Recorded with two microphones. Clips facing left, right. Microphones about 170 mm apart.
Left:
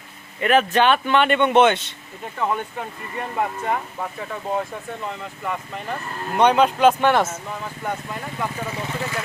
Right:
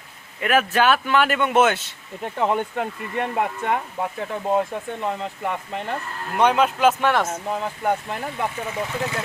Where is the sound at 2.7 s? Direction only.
70° right (ahead or behind).